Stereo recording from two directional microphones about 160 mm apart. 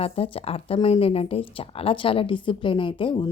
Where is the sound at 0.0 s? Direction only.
35° left (ahead or behind).